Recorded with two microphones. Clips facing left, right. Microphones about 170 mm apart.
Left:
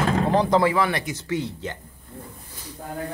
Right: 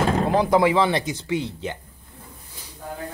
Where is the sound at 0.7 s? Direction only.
25° right (ahead or behind).